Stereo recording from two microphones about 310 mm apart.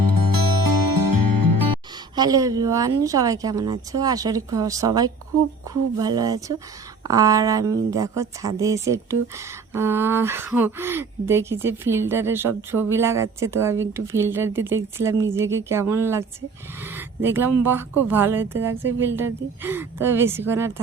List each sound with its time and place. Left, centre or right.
0.0 s music: right
2.1 s speech: centre